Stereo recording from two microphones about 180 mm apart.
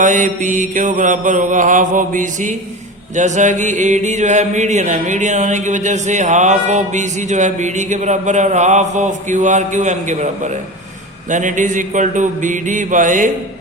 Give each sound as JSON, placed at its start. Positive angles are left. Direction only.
{"t": 0.0, "sound": "mantra", "side_deg": -45}